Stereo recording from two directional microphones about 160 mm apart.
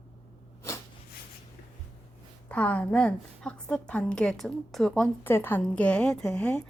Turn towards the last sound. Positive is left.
turn(degrees=5)  # may be behind; listen again after turning